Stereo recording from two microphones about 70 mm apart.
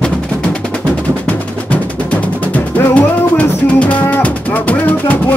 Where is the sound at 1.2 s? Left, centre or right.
Left.